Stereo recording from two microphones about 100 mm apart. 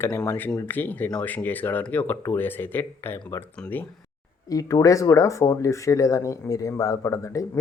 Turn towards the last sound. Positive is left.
turn(degrees=30)  # may be behind; listen again after turning